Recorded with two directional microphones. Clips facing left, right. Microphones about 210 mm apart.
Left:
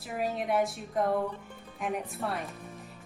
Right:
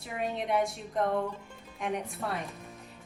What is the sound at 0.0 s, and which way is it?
A woman's voice, centre (ahead or behind).